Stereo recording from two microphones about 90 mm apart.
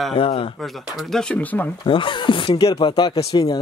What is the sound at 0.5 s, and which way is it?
Speech, centre (ahead or behind).